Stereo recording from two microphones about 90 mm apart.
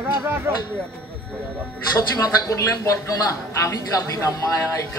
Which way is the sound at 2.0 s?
40° left (ahead or behind).